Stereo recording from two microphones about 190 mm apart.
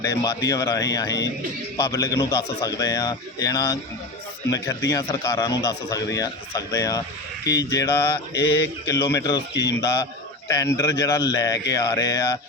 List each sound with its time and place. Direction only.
0.0 s a man's voice: 20° left (ahead or behind)